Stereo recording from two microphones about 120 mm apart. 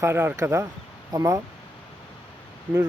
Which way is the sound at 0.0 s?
20° right (ahead or behind).